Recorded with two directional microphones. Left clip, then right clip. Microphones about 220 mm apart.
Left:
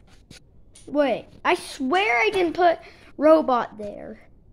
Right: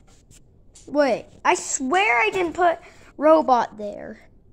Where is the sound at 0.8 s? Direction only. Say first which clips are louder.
Right 2 dB; centre (ahead or behind); by 3.4 s 15° left (ahead or behind).